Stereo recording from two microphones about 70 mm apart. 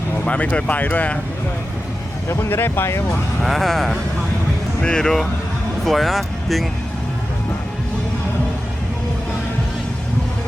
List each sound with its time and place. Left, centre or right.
0.3 s speech: centre
2.3 s speech: left
3.4 s speech: centre